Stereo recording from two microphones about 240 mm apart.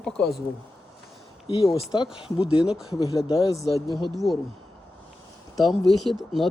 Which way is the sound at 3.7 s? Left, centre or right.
Centre.